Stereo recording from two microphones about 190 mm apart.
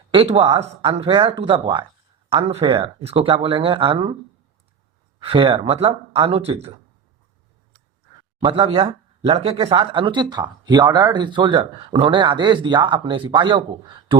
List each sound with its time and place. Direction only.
0.1 s speech: 30° right (ahead or behind)
5.2 s speech: 25° right (ahead or behind)
8.4 s speech: 25° right (ahead or behind)